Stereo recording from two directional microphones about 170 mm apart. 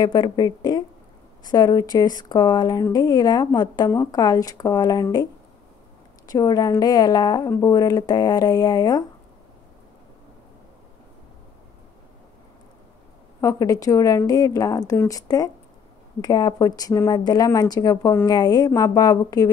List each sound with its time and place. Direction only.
0.0 s speech: 25° left (ahead or behind)
13.4 s speech: 20° left (ahead or behind)